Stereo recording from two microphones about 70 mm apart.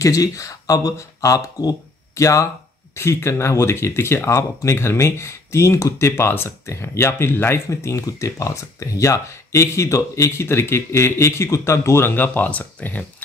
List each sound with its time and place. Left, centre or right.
0.0 s speech: left
3.0 s speech: left